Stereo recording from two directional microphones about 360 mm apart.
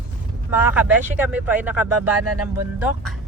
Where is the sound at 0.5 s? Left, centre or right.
Centre.